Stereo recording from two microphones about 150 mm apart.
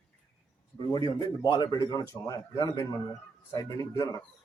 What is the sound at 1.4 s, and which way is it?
Speech, 30° left (ahead or behind).